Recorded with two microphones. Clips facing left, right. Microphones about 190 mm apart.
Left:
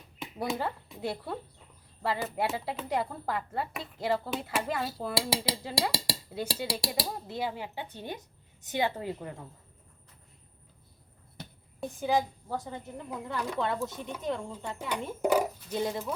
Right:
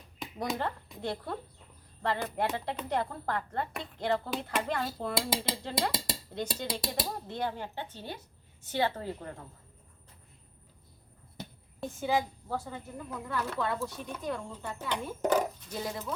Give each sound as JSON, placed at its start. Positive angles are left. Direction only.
{"t": 0.2, "sound": "a woman's voice", "side_deg": 5}
{"t": 11.8, "sound": "a woman's voice", "side_deg": 15}
{"t": 15.8, "sound": "speech", "side_deg": 25}